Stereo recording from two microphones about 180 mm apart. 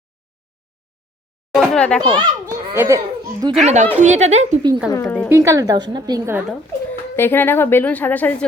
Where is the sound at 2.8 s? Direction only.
20° right (ahead or behind).